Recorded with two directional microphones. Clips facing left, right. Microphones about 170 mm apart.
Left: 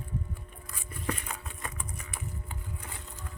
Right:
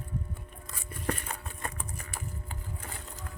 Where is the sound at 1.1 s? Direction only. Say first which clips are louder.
Right 1 dB; 40° right (ahead or behind).